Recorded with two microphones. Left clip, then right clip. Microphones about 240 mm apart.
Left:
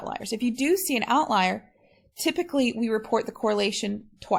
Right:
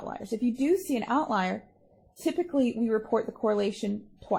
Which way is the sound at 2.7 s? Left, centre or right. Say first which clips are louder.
Left 2 dB; left.